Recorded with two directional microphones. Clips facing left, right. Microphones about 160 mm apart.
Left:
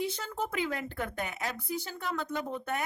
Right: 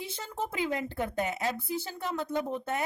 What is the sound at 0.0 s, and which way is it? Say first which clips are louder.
Speech: left 2 dB; 25° right (ahead or behind).